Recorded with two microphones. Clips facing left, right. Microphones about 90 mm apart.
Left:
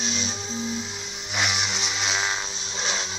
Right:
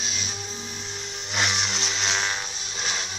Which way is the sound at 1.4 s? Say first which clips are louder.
Even; 5° left (ahead or behind).